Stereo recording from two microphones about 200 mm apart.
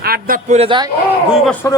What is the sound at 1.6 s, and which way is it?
Speech, 10° left (ahead or behind).